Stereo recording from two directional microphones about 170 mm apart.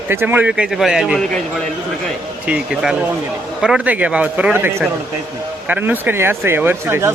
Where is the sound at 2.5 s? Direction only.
5° right (ahead or behind).